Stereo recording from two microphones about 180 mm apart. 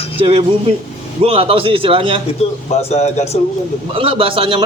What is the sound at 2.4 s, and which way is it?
Speech, 35° left (ahead or behind).